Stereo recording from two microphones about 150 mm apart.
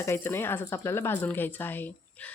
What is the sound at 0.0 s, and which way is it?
Speech, 15° left (ahead or behind).